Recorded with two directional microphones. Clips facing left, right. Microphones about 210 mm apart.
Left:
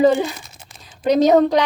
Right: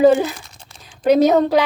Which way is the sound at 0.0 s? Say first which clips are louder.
Right 2 dB; 5° right (ahead or behind).